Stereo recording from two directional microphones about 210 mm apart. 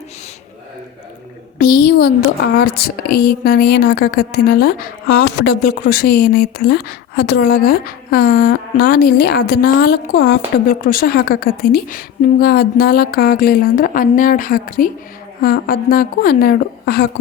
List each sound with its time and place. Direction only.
1.5 s a woman's voice: 45° left (ahead or behind)